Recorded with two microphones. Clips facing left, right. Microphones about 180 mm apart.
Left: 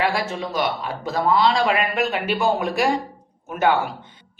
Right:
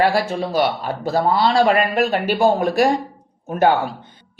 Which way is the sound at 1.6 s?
40° right (ahead or behind).